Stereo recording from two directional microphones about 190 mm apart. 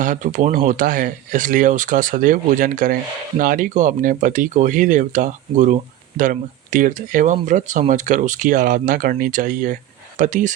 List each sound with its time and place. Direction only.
0.0 s speech: 45° right (ahead or behind)